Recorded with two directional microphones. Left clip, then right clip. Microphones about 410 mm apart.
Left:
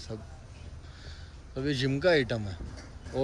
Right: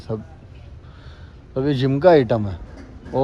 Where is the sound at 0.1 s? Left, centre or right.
Right.